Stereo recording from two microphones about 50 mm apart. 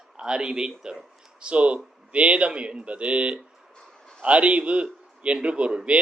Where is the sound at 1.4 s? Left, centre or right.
Right.